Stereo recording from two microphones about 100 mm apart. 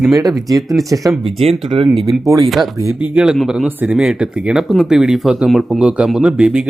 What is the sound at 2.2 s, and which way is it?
Speech, 30° right (ahead or behind).